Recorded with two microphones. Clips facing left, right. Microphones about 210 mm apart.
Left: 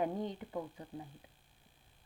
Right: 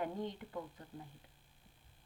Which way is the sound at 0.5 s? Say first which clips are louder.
Left 4 dB; 15° left (ahead or behind).